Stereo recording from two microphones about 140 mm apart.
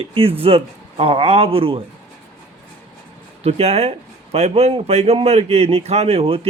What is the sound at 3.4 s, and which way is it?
Speech, 45° right (ahead or behind).